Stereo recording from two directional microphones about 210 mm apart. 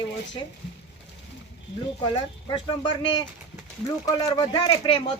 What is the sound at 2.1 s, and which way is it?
Speech, 20° left (ahead or behind).